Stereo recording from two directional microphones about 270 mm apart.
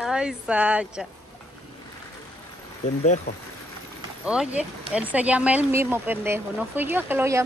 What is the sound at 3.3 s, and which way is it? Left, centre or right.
Speech, left.